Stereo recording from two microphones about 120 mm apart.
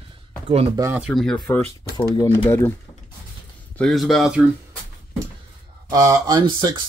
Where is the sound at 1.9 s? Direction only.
30° left (ahead or behind).